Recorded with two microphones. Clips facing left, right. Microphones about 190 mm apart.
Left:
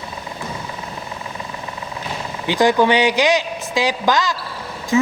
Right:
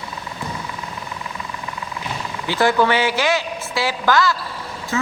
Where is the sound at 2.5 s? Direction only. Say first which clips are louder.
Left 2 dB; 15° left (ahead or behind).